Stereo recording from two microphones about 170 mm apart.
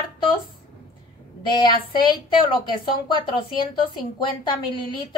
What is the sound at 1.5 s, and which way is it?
Speech, 30° left (ahead or behind).